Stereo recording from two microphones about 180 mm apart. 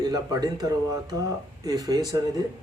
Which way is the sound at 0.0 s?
20° right (ahead or behind).